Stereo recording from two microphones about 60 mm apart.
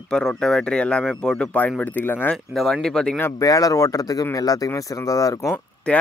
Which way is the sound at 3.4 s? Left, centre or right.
Left.